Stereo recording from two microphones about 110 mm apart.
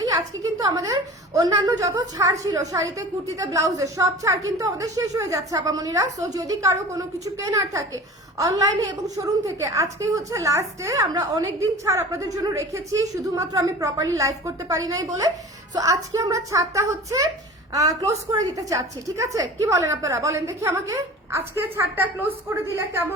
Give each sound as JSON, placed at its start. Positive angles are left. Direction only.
{"t": 0.0, "sound": "a woman's voice", "side_deg": -35}